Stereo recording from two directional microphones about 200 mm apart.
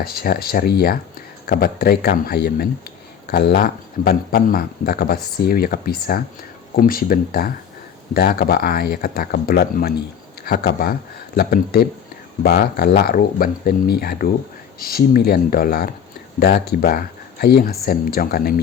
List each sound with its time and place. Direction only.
0.0 s speech: 50° left (ahead or behind)